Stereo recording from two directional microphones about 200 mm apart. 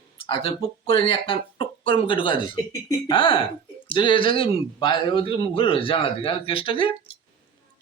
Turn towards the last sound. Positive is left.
turn(degrees=25)  # may be behind; listen again after turning